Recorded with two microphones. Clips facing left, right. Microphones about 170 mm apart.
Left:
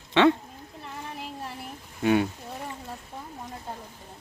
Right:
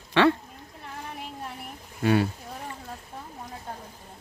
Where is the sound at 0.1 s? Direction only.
20° left (ahead or behind).